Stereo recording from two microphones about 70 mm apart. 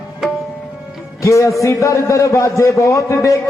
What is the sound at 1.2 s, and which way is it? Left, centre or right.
A man's voice, left.